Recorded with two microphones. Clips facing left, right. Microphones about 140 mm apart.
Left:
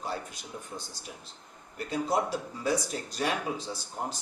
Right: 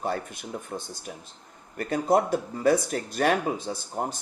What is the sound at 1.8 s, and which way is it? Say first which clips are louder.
Speech: right 6 dB; 55° right (ahead or behind).